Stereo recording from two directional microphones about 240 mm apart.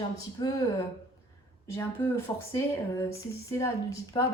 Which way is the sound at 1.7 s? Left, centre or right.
Centre.